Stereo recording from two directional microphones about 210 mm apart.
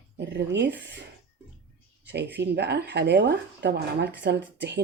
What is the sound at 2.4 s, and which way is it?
Speech, 55° right (ahead or behind).